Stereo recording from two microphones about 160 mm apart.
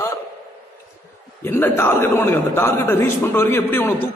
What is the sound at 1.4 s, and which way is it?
A man's voice, 15° left (ahead or behind).